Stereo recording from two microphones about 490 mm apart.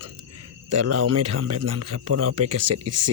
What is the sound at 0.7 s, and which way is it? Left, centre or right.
A man's voice, right.